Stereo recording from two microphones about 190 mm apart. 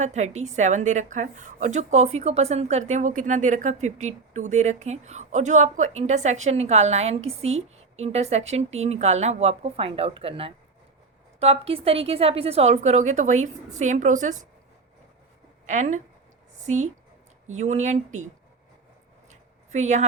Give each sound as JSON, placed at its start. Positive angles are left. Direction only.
{"t": 0.0, "sound": "a woman's voice", "side_deg": -35}
{"t": 15.6, "sound": "a woman's voice", "side_deg": -40}
{"t": 17.5, "sound": "a woman's voice", "side_deg": -35}
{"t": 19.3, "sound": "a sound", "side_deg": -35}